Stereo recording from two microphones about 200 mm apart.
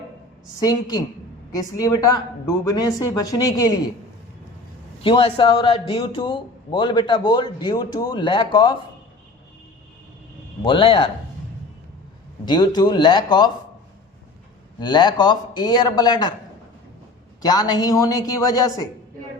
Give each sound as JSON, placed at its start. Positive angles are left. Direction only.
{"t": 0.6, "sound": "a man's voice", "side_deg": 20}
{"t": 5.0, "sound": "a man's voice", "side_deg": 25}
{"t": 10.6, "sound": "a man's voice", "side_deg": 25}
{"t": 12.5, "sound": "a man's voice", "side_deg": 20}
{"t": 14.8, "sound": "a man's voice", "side_deg": 20}
{"t": 17.4, "sound": "a man's voice", "side_deg": 20}